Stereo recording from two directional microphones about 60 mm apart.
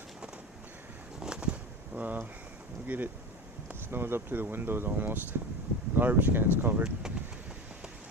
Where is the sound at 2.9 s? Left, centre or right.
Right.